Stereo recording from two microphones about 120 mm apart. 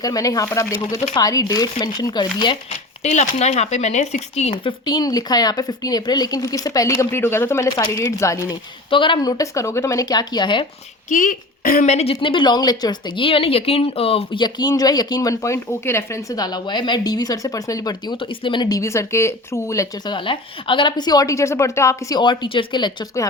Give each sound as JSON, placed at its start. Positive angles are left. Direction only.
{"t": 0.0, "sound": "speech", "side_deg": 30}
{"t": 3.0, "sound": "speech", "side_deg": 70}
{"t": 8.9, "sound": "speech", "side_deg": 45}
{"t": 11.1, "sound": "a child's voice", "side_deg": 90}
{"t": 11.8, "sound": "a woman's voice", "side_deg": 70}
{"t": 12.2, "sound": "speech", "side_deg": 45}
{"t": 14.3, "sound": "speech", "side_deg": 35}
{"t": 18.8, "sound": "speech", "side_deg": 25}
{"t": 20.1, "sound": "speech", "side_deg": 45}
{"t": 22.2, "sound": "speech", "side_deg": 40}